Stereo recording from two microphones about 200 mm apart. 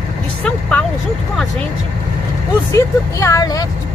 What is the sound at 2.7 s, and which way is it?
Speech, 15° left (ahead or behind).